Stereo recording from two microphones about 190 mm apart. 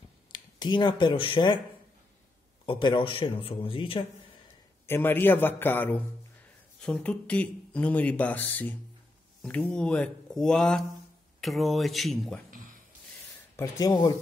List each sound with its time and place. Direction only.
0.3 s speech: 25° left (ahead or behind)
2.6 s speech: 25° left (ahead or behind)
4.8 s speech: 10° left (ahead or behind)
13.6 s speech: 20° left (ahead or behind)